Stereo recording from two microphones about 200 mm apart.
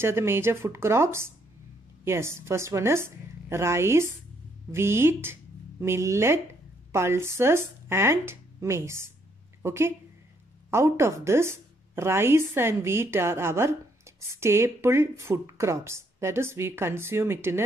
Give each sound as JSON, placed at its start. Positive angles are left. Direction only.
{"t": 0.0, "sound": "a woman's voice", "side_deg": -10}